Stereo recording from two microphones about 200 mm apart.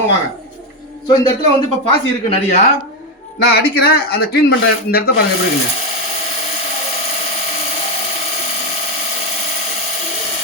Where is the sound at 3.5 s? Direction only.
50° left (ahead or behind).